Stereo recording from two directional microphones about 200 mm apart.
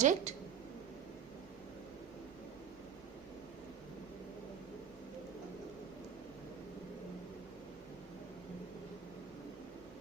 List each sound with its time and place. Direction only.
0.0 s a woman's voice: 35° right (ahead or behind)